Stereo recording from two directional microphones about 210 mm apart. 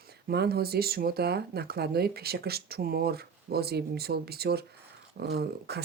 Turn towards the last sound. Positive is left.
turn(degrees=-50)  # may be behind; listen again after turning